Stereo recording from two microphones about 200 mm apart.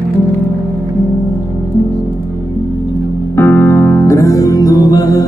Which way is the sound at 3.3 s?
10° left (ahead or behind).